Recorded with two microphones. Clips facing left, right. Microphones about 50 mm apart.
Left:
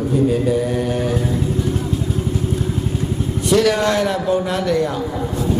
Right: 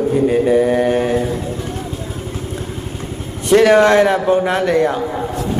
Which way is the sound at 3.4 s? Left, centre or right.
Right.